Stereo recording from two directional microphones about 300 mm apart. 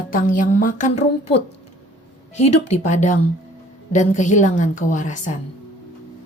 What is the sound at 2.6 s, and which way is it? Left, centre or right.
A woman's voice, left.